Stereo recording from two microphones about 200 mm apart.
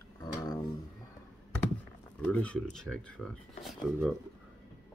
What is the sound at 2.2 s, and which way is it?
Speech, 5° left (ahead or behind).